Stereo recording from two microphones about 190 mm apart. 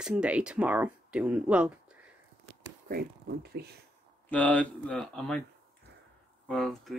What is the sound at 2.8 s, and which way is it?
Speech, 55° right (ahead or behind).